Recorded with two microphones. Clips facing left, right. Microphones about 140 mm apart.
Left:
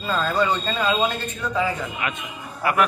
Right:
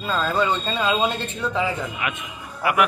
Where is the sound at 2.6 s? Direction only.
10° right (ahead or behind).